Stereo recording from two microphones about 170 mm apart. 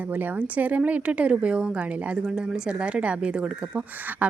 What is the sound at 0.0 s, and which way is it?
Speech, 10° right (ahead or behind).